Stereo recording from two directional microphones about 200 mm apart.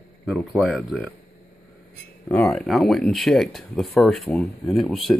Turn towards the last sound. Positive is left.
turn(degrees=0)  # may be behind; listen again after turning